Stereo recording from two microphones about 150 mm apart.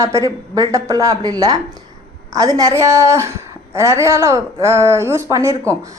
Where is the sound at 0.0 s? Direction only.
20° right (ahead or behind).